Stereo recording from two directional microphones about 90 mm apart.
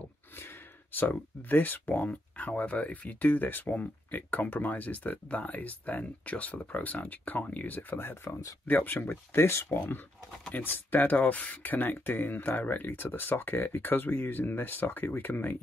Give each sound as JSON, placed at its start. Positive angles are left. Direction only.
{"t": 0.4, "sound": "speech", "side_deg": 20}